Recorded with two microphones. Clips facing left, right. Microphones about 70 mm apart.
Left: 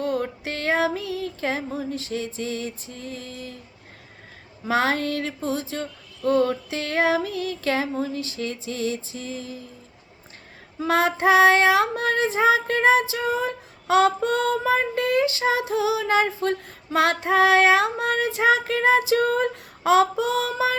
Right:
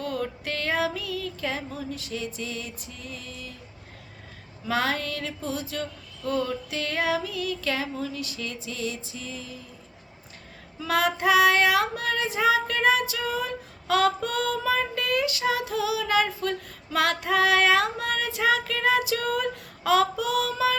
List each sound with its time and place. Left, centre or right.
0.0 s music: left
4.6 s music: left
10.8 s child singing: left